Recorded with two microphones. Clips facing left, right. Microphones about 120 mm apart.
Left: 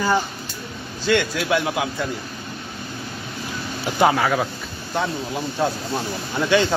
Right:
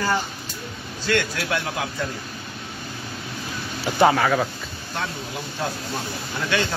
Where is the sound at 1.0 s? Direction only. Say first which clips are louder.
Left 3 dB; 15° left (ahead or behind).